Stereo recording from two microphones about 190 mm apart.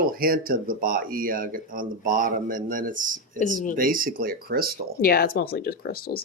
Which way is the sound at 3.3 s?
40° left (ahead or behind).